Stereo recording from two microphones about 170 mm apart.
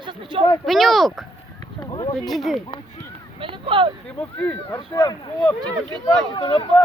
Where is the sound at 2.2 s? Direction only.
Centre (ahead or behind).